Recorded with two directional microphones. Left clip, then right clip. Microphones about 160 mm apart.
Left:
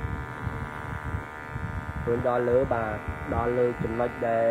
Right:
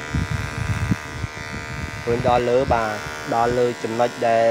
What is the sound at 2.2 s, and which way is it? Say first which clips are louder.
Speech: right 6 dB; 55° right (ahead or behind).